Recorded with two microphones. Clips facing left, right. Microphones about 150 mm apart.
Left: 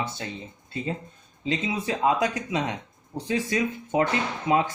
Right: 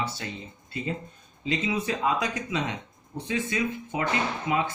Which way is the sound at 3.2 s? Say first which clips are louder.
Left 3 dB; 35° left (ahead or behind).